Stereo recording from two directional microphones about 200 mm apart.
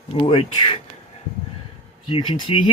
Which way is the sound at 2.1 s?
25° left (ahead or behind).